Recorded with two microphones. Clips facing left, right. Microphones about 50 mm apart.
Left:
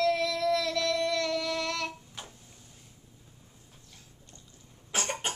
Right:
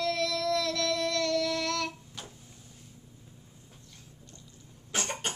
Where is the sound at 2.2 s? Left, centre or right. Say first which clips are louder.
Even; centre.